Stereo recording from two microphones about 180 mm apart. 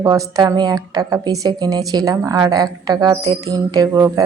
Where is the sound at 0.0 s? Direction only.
20° right (ahead or behind).